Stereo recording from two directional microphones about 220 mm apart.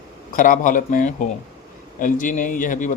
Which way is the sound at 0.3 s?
35° left (ahead or behind).